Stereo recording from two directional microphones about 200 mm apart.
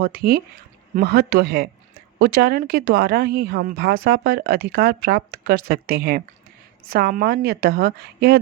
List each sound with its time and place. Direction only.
0.0 s speech: 50° right (ahead or behind)